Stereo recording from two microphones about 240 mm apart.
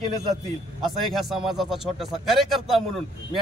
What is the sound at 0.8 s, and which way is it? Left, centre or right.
Speech, centre.